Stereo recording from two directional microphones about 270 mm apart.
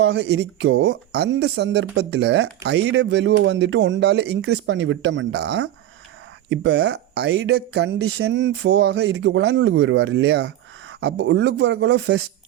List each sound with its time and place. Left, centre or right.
0.0 s speech: right